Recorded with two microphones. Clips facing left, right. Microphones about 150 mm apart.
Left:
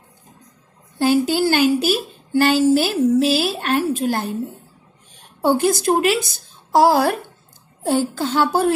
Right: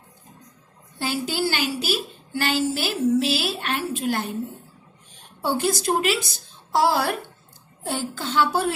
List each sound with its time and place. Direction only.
0.9 s speech: 45° left (ahead or behind)
5.4 s speech: 50° left (ahead or behind)